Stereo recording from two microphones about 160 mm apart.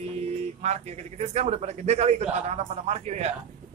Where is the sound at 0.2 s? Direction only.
45° right (ahead or behind).